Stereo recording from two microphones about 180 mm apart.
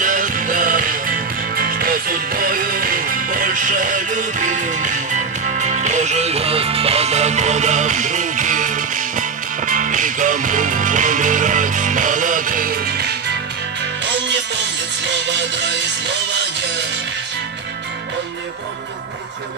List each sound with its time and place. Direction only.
0.0 s music: 45° right (ahead or behind)